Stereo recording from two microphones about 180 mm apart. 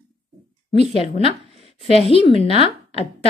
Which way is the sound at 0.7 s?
30° left (ahead or behind).